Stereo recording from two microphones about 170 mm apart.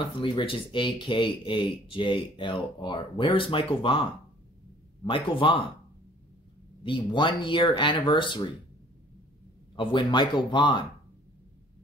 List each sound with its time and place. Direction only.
0.0 s speech: 30° left (ahead or behind)
6.8 s speech: 30° left (ahead or behind)
9.8 s speech: 30° left (ahead or behind)